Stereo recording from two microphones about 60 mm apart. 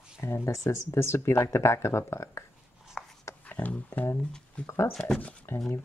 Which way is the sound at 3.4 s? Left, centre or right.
Left.